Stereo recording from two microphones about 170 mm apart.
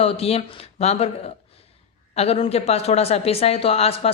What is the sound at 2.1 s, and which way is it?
A woman's voice, 35° left (ahead or behind).